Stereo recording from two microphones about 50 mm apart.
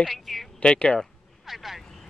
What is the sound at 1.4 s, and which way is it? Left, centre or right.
Vehicle, centre.